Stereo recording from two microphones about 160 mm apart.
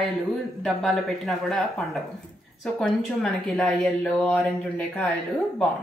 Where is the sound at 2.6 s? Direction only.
5° left (ahead or behind).